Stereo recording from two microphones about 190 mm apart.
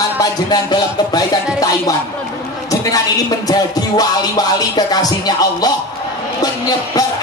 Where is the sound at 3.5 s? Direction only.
20° left (ahead or behind).